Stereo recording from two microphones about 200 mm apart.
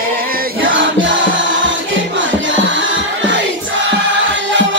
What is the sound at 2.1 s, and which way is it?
Music, 70° right (ahead or behind).